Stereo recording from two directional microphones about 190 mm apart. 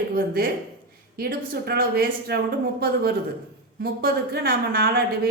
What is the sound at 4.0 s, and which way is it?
A woman's voice, 55° right (ahead or behind).